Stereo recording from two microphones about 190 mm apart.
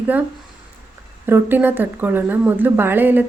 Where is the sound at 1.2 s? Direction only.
10° right (ahead or behind).